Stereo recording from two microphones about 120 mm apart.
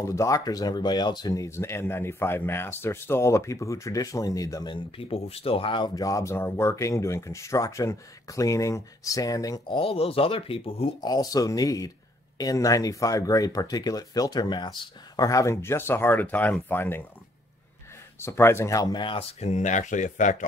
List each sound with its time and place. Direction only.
0.0 s speech: 25° left (ahead or behind)
4.7 s speech: 50° left (ahead or behind); by 9.6 s 30° left (ahead or behind)
9.7 s speech: 50° left (ahead or behind)
11.0 s speech: 35° left (ahead or behind); by 17.0 s 15° left (ahead or behind)
18.2 s speech: 20° left (ahead or behind); by 19.2 s 40° left (ahead or behind)
19.4 s speech: 80° left